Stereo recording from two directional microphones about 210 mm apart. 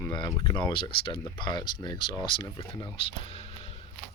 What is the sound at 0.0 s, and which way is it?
Speech, 20° left (ahead or behind).